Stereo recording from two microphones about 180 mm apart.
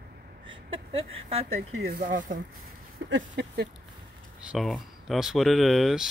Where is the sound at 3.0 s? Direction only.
75° right (ahead or behind).